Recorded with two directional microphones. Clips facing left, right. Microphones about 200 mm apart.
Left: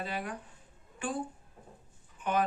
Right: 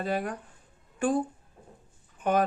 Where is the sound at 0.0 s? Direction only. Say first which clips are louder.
Right 7 dB; 45° right (ahead or behind).